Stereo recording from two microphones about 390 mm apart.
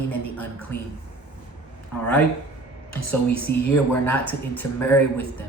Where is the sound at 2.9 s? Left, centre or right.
Left.